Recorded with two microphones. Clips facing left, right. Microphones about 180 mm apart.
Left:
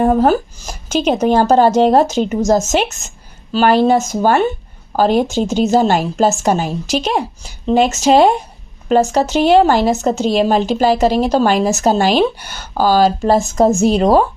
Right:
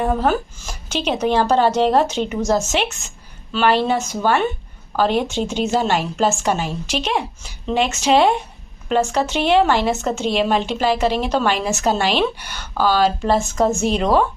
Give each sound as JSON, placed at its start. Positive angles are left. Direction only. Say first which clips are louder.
{"t": 0.0, "sound": "speech", "louder": "left 6 dB", "side_deg": 40}